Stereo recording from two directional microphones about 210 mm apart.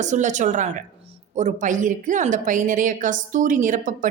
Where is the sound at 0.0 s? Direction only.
35° right (ahead or behind).